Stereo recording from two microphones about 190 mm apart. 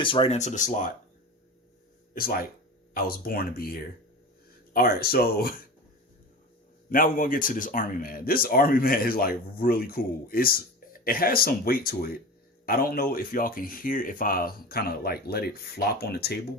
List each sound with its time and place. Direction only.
0.0 s speech: 30° left (ahead or behind)
2.9 s speech: 50° left (ahead or behind)
6.9 s speech: 45° left (ahead or behind)